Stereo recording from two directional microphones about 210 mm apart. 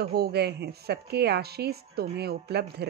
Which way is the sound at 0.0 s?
50° right (ahead or behind).